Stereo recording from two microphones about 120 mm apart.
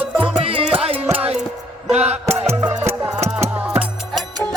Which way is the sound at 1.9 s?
65° right (ahead or behind).